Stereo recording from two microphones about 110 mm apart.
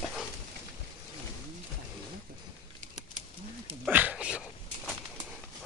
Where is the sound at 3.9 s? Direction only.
15° right (ahead or behind).